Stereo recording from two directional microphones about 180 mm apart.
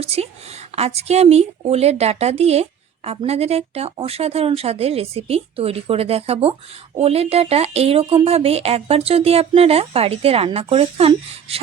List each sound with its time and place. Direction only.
0.0 s speech: 35° right (ahead or behind)